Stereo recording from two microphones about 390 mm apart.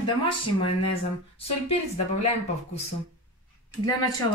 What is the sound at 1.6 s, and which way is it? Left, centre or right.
Speech, centre.